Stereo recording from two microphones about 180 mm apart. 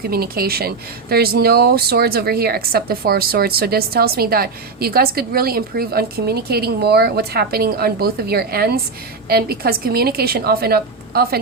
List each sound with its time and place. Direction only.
0.1 s a woman's voice: 55° right (ahead or behind)